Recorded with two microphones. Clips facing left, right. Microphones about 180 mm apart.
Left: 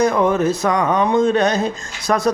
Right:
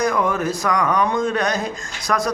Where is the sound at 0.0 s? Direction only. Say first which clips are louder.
Left 5 dB; 25° left (ahead or behind).